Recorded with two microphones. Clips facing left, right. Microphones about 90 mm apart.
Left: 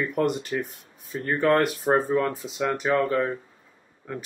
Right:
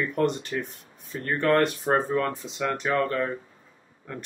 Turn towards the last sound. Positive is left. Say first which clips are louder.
# left 2 dB
turn(degrees=5)  # may be behind; listen again after turning